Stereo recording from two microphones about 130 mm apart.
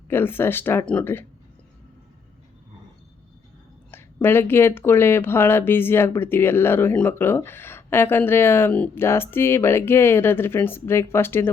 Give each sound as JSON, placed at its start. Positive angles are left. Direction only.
{"t": 0.1, "sound": "speech", "side_deg": 15}
{"t": 3.9, "sound": "speech", "side_deg": 15}